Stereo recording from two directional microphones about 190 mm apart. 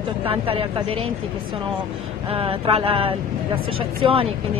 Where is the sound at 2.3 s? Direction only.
30° right (ahead or behind).